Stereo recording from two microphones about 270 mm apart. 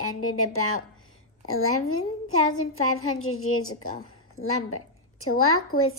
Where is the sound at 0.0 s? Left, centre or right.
Left.